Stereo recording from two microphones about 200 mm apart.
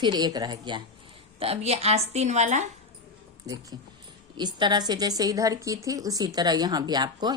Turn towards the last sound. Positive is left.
turn(degrees=-20)  # may be behind; listen again after turning